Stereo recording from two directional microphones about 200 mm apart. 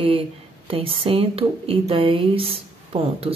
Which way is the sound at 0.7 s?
25° right (ahead or behind).